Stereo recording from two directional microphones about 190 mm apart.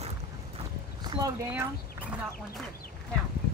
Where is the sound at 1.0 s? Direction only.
20° right (ahead or behind).